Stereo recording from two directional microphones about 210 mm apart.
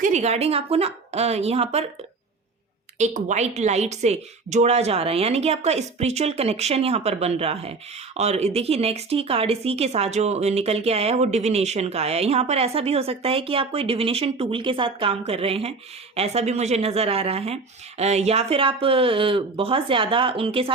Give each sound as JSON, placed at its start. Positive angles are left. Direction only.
{"t": 0.0, "sound": "a woman's voice", "side_deg": -35}
{"t": 3.0, "sound": "a woman's voice", "side_deg": -35}